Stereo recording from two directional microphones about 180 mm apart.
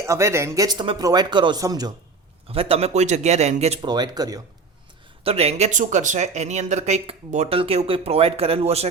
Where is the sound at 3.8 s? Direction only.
25° right (ahead or behind).